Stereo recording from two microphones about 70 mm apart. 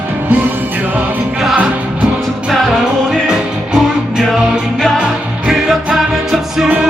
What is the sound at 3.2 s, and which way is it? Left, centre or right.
Music, centre.